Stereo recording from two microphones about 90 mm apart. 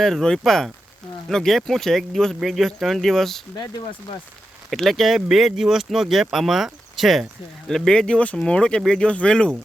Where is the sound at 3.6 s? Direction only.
55° left (ahead or behind).